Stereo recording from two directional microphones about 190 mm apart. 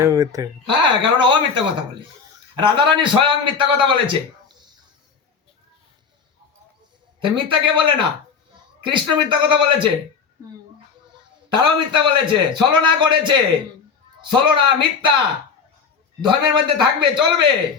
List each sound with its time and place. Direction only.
0.0 s a man's voice: 15° right (ahead or behind)
7.3 s a man's voice: 25° right (ahead or behind)
11.4 s a man's voice: 25° right (ahead or behind)
16.2 s a man's voice: 25° right (ahead or behind)